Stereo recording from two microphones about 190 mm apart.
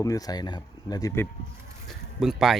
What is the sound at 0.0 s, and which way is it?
Speech, 20° left (ahead or behind).